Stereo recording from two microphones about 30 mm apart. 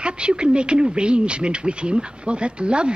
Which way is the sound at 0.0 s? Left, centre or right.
Right.